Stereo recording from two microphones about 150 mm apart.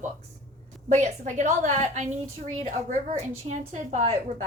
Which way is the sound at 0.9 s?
55° right (ahead or behind).